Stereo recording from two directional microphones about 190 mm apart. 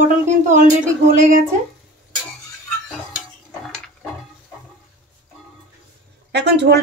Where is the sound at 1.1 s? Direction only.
45° right (ahead or behind).